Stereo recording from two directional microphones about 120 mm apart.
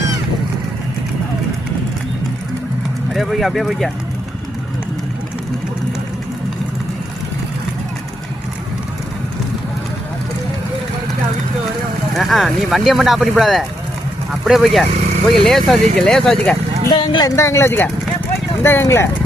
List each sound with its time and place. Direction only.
3.1 s speech: centre (ahead or behind)
12.1 s speech: centre (ahead or behind)
16.9 s speech: 40° left (ahead or behind)
17.2 s speech: 25° left (ahead or behind)